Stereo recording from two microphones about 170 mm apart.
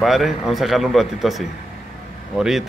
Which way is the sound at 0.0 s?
Centre (ahead or behind).